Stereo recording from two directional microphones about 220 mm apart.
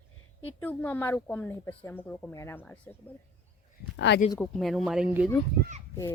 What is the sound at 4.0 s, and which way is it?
Speech, 50° left (ahead or behind).